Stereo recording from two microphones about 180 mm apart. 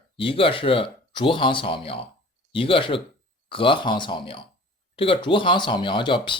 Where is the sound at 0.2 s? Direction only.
30° left (ahead or behind).